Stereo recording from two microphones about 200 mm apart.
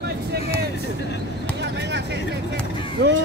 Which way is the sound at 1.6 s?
60° right (ahead or behind).